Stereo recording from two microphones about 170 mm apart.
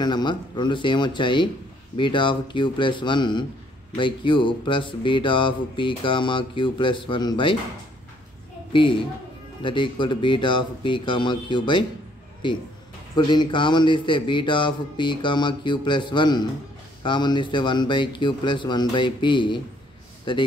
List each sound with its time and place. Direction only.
0.0 s speech: 25° left (ahead or behind)
9.6 s speech: 30° left (ahead or behind)
13.1 s speech: 25° left (ahead or behind)